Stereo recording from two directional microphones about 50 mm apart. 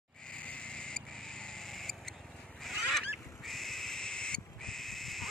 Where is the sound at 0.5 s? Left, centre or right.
Centre.